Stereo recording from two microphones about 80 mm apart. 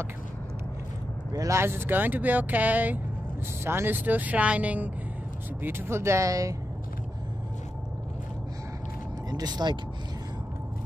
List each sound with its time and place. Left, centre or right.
1.3 s speech: right
1.6 s speech: right
5.6 s speech: right
9.3 s speech: right